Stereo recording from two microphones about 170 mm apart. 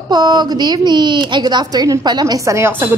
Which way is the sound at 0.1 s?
25° right (ahead or behind).